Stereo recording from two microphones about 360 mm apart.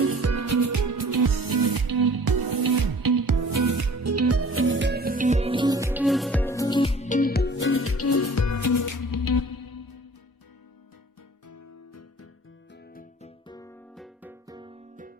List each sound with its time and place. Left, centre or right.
0.0 s music: right; by 9.9 s left
12.9 s music: left
13.5 s music: centre